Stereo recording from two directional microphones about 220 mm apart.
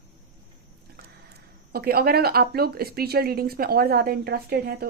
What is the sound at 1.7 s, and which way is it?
Speech, 45° right (ahead or behind).